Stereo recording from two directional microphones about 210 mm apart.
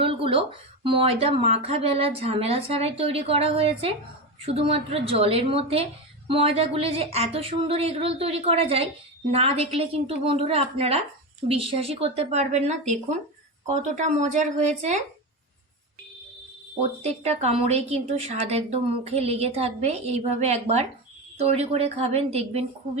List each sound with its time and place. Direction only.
0.0 s a sound: 25° right (ahead or behind)
0.9 s a woman's voice: 25° right (ahead or behind)
17.0 s a woman's voice: 30° right (ahead or behind)